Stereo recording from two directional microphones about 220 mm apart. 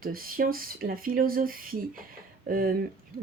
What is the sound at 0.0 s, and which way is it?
Speech, 40° right (ahead or behind).